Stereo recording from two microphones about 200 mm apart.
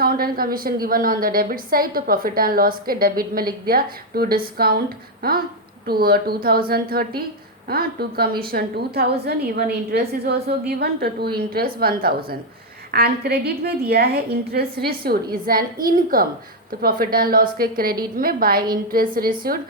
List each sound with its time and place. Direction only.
0.0 s a woman's voice: 50° right (ahead or behind)
5.8 s a woman's voice: 50° right (ahead or behind)